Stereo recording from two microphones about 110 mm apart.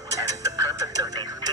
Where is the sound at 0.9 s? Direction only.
35° right (ahead or behind).